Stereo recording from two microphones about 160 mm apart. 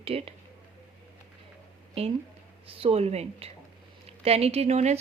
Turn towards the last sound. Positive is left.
turn(degrees=-40)  # may be behind; listen again after turning